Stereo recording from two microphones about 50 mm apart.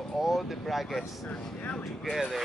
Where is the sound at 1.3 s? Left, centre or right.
Left.